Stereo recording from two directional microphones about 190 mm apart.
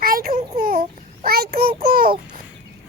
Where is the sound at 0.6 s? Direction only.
50° right (ahead or behind).